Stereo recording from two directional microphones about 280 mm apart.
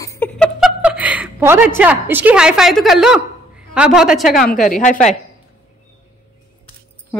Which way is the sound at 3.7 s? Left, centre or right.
Centre.